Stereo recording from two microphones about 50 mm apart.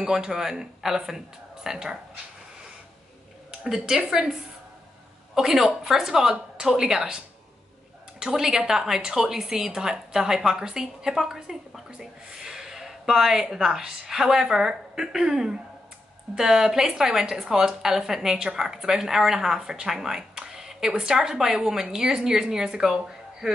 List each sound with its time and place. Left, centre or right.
0.0 s a woman's voice: centre
3.6 s a woman's voice: centre
8.2 s a woman's voice: centre